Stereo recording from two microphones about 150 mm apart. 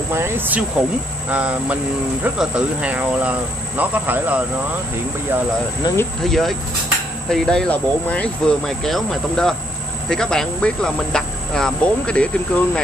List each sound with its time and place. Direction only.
0.1 s speech: 15° right (ahead or behind)
5.9 s speech: 25° left (ahead or behind)
6.2 s speech: centre (ahead or behind)